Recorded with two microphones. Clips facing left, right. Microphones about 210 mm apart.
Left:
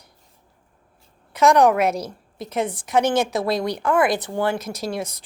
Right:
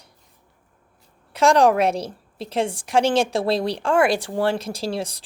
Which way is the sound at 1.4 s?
30° right (ahead or behind).